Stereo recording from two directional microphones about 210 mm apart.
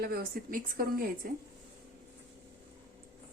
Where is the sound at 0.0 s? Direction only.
45° right (ahead or behind).